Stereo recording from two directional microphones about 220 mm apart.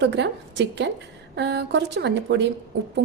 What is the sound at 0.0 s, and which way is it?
A woman's voice, 50° right (ahead or behind).